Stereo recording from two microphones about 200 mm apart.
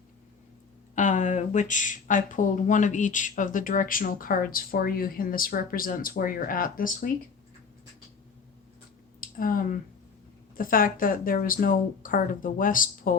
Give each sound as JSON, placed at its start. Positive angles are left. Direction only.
{"t": 0.9, "sound": "speech", "side_deg": 40}
{"t": 9.2, "sound": "speech", "side_deg": 45}